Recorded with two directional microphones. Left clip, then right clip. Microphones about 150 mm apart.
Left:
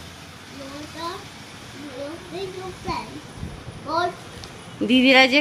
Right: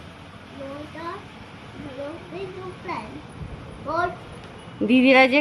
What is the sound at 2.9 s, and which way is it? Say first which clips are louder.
Children playing: left 3 dB; 5° left (ahead or behind).